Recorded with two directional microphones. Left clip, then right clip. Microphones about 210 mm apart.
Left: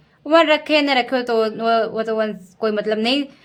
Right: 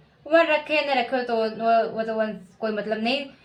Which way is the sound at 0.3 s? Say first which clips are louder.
Left 5 dB; 40° left (ahead or behind).